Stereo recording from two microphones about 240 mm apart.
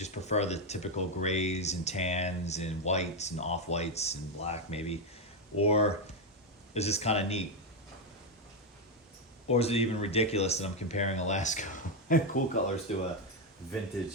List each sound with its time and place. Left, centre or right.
0.0 s speech: left
9.5 s speech: left